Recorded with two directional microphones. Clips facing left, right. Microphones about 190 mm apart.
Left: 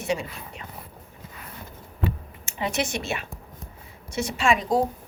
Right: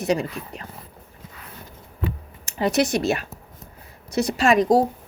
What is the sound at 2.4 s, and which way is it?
Speech, 40° right (ahead or behind).